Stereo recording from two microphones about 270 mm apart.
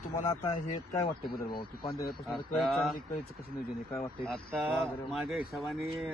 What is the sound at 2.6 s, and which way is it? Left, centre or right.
Speech, centre.